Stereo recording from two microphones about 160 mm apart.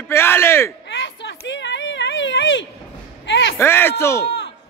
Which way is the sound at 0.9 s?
90° left.